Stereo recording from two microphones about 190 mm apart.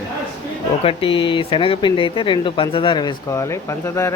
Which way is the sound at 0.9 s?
30° left (ahead or behind).